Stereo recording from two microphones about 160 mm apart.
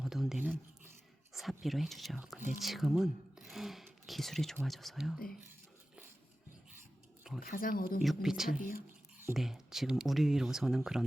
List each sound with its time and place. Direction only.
0.0 s a sound: centre (ahead or behind)
1.3 s speech: centre (ahead or behind)
7.4 s speech: 65° left (ahead or behind)
8.0 s speech: centre (ahead or behind)